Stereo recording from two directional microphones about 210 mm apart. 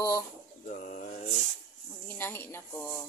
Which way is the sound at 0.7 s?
40° left (ahead or behind).